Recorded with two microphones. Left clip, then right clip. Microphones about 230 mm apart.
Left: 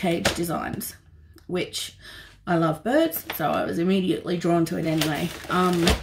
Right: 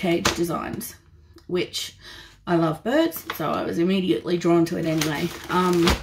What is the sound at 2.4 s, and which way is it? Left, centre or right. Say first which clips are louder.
Speech: right 1 dB; centre.